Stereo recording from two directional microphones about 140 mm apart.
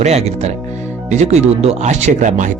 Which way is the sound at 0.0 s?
50° right (ahead or behind).